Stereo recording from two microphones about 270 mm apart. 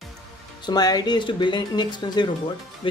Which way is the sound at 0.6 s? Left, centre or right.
Centre.